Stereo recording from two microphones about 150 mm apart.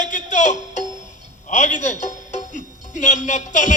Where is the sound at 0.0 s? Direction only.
55° left (ahead or behind).